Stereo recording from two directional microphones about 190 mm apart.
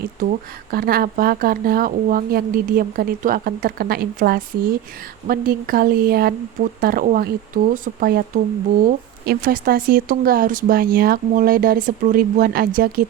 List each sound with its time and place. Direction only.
0.7 s speech: 50° right (ahead or behind)